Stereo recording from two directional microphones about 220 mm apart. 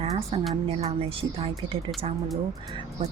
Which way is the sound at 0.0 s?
30° right (ahead or behind).